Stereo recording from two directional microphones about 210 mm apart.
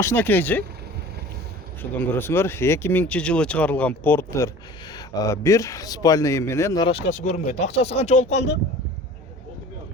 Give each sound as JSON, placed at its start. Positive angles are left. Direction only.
{"t": 0.0, "sound": "speech", "side_deg": 10}
{"t": 1.8, "sound": "speech", "side_deg": 10}
{"t": 8.3, "sound": "speech", "side_deg": 55}